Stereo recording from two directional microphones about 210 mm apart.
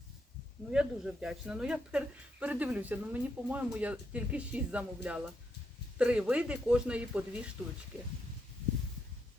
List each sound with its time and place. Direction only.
0.7 s speech: 5° right (ahead or behind)